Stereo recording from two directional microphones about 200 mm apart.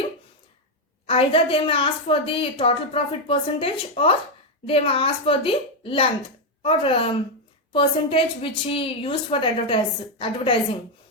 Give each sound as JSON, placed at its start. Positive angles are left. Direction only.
{"t": 1.0, "sound": "a woman's voice", "side_deg": 25}